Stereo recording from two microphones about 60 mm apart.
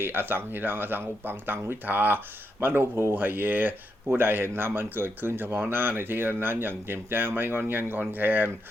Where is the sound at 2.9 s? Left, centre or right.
Right.